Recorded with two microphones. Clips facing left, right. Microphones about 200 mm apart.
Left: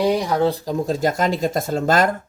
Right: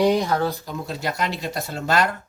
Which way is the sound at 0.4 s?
35° left (ahead or behind).